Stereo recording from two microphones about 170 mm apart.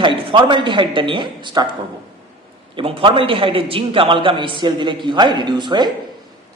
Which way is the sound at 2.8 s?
30° right (ahead or behind).